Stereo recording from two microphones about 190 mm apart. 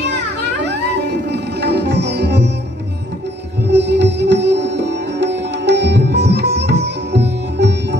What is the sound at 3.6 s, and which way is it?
Sitar, 65° right (ahead or behind).